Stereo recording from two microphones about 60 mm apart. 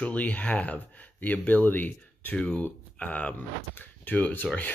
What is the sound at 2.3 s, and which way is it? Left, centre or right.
Speech, centre.